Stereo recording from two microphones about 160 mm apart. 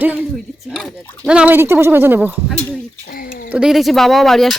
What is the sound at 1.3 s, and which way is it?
Speech, 10° right (ahead or behind).